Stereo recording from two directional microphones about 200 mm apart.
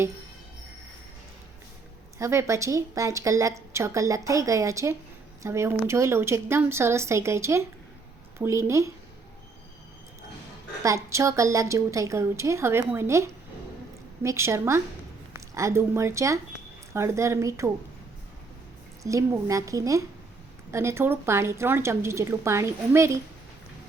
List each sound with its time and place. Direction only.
2.1 s a woman's voice: 15° right (ahead or behind)
10.8 s a woman's voice: 15° right (ahead or behind)
19.0 s a woman's voice: 15° right (ahead or behind)